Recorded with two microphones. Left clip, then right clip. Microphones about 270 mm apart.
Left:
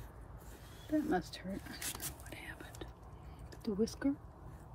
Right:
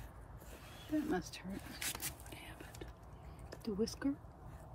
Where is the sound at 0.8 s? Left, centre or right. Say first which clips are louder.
Left 3 dB; centre.